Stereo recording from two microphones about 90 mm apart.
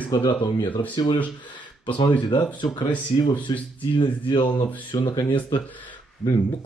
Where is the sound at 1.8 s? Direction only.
80° left.